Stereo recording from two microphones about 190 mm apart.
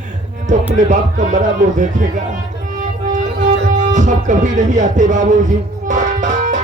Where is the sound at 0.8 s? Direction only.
40° right (ahead or behind).